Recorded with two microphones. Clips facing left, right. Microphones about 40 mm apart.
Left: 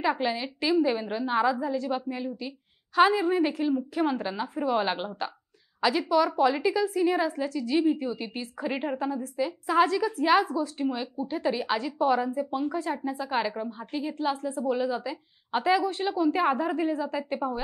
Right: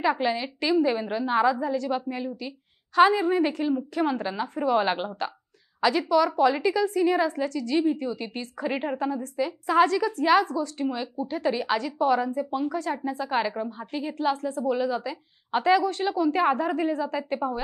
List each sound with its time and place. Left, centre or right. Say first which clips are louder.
0.0 s a woman's voice: right 2 dB; centre
12.6 s a woman's voice: right 1 dB; centre